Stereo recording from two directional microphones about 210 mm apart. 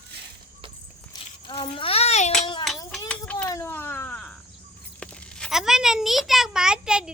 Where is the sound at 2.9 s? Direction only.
10° left (ahead or behind).